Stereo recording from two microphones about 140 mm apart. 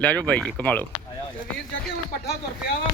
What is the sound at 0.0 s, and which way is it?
Speech, 10° left (ahead or behind).